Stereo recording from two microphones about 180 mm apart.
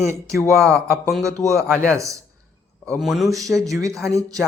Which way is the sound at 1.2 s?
15° right (ahead or behind).